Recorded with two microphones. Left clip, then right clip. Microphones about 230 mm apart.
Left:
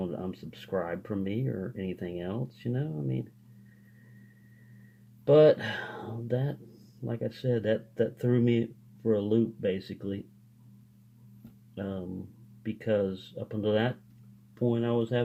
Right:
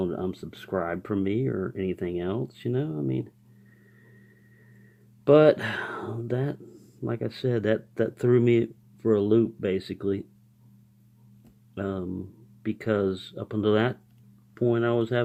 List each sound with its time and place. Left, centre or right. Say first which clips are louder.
0.3 s speech: right 3 dB; right
5.2 s speech: right 2 dB; right
11.7 s speech: right 6 dB; right